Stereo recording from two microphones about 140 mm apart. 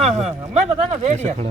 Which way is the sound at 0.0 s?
50° right (ahead or behind).